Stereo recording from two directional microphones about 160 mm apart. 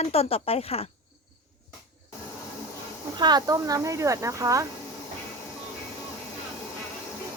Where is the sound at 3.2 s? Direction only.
25° right (ahead or behind).